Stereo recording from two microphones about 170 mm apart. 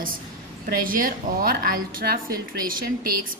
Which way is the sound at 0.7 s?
55° right (ahead or behind).